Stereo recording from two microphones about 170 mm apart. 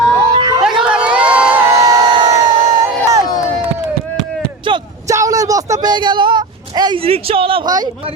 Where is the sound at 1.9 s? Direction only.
25° right (ahead or behind).